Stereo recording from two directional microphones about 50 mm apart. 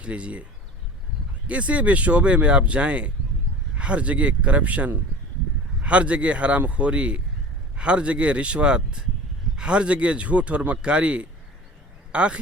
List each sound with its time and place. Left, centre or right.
0.0 s speech: right
1.5 s speech: right